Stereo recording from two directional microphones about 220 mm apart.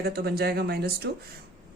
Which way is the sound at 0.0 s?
45° right (ahead or behind).